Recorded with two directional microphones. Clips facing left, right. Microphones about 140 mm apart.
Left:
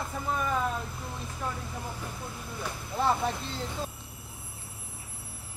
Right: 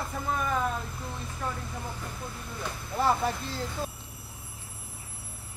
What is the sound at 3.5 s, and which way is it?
Speech, 5° right (ahead or behind).